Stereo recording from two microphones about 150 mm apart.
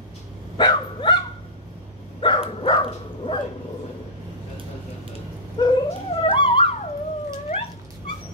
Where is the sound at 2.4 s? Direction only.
35° left (ahead or behind).